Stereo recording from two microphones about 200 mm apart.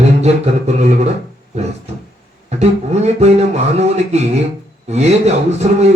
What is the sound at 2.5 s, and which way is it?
A man's voice, 35° right (ahead or behind).